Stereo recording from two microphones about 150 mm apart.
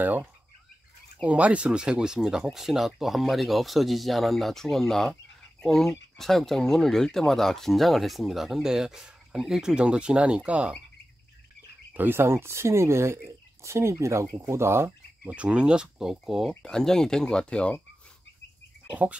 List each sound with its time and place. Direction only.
0.0 s speech: 10° right (ahead or behind)
11.9 s speech: 15° right (ahead or behind); by 17.8 s 5° left (ahead or behind)